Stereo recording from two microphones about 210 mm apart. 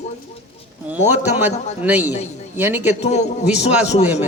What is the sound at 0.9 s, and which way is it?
A man's voice, 10° right (ahead or behind).